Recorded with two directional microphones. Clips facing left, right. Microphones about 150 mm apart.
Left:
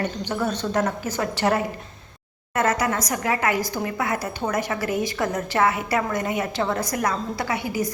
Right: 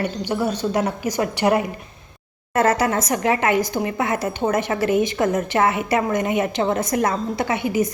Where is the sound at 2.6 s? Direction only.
30° right (ahead or behind).